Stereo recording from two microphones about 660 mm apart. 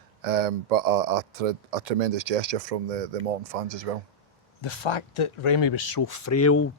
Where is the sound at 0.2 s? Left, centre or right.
Right.